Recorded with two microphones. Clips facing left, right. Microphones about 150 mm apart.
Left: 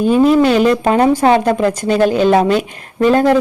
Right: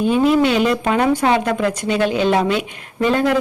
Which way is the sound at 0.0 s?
40° left (ahead or behind).